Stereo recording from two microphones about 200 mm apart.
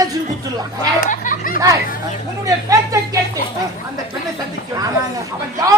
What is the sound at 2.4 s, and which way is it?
Speech, 15° right (ahead or behind).